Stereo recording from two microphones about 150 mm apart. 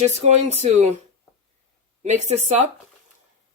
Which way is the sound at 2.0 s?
50° right (ahead or behind).